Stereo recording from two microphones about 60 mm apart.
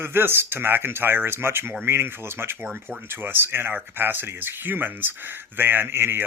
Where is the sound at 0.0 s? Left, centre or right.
Right.